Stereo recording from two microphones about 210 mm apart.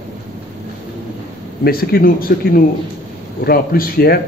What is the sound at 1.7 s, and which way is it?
A man's voice, 45° left (ahead or behind).